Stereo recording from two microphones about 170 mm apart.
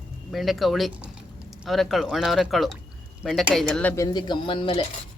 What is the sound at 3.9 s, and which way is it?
Speech, 20° left (ahead or behind).